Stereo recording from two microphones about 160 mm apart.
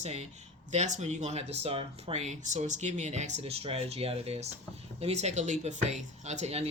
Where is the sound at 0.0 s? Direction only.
40° right (ahead or behind).